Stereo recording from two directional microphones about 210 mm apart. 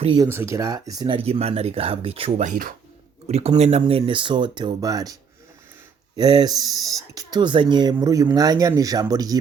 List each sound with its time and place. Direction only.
0.0 s speech: 25° right (ahead or behind)
0.3 s speech: 10° right (ahead or behind)
6.1 s speech: 20° right (ahead or behind)